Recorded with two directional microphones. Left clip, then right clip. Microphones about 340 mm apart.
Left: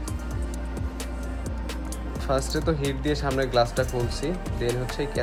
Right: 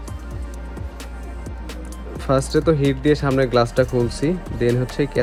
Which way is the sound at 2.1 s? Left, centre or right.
Centre.